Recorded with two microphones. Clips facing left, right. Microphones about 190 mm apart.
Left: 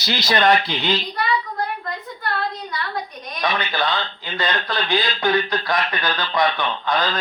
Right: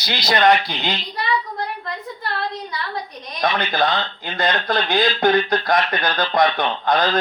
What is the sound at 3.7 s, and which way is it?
Speech, 45° right (ahead or behind).